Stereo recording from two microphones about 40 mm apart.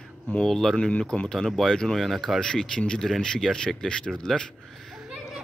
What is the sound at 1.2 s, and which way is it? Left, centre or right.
Speech, centre.